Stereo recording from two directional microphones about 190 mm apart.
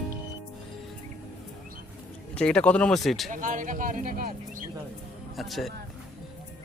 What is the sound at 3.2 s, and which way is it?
Speech, 45° right (ahead or behind).